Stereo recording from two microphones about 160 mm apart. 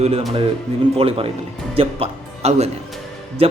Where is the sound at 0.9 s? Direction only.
35° right (ahead or behind).